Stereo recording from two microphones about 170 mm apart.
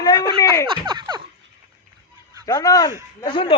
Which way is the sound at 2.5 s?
20° left (ahead or behind).